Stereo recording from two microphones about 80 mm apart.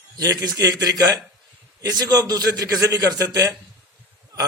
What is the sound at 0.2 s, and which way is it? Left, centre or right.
A man's voice, right.